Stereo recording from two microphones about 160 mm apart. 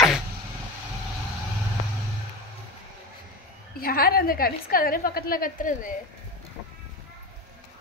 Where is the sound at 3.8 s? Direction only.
70° left (ahead or behind).